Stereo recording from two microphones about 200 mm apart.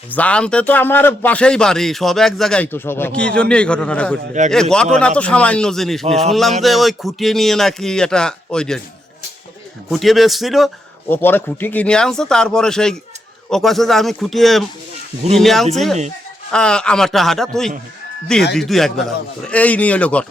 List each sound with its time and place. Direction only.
0.1 s speech: 5° left (ahead or behind)
6.1 s speech: 30° right (ahead or behind)
6.3 s speech: centre (ahead or behind)
9.9 s speech: centre (ahead or behind)
11.1 s speech: 10° left (ahead or behind)